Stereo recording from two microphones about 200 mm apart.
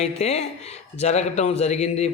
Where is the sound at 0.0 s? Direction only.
30° left (ahead or behind).